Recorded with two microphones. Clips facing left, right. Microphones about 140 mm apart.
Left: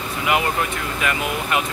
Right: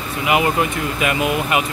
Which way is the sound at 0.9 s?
15° right (ahead or behind).